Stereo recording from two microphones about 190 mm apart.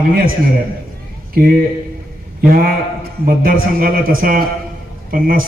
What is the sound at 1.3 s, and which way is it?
Speech, 50° right (ahead or behind).